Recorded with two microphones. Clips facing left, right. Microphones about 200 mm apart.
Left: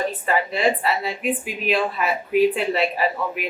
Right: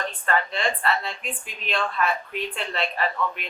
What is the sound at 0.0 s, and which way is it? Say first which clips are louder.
Speech: left 4 dB; 5° left (ahead or behind).